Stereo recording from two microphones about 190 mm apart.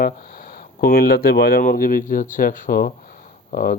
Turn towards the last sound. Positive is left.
turn(degrees=45)  # may be behind; listen again after turning